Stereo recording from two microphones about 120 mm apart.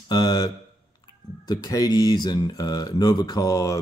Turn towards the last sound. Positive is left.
turn(degrees=30)  # may be behind; listen again after turning